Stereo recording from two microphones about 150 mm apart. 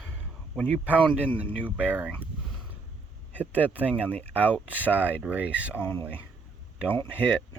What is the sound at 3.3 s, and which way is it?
Speech, 10° right (ahead or behind).